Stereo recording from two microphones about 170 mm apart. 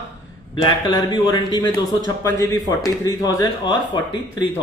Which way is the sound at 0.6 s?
25° left (ahead or behind).